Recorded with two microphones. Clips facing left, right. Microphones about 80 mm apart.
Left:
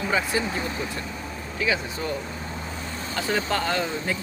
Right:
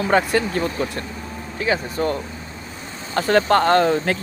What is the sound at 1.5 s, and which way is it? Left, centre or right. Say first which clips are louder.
Speech: right 5 dB; right.